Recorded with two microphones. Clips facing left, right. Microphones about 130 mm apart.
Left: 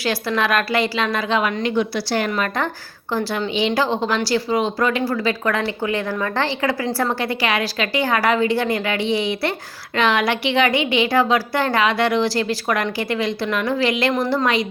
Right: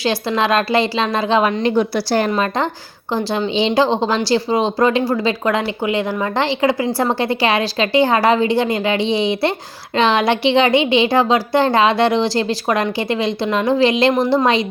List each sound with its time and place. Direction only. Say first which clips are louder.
0.0 s speech: right 3 dB; 25° right (ahead or behind)
2.3 s speech: right 4 dB; 25° right (ahead or behind)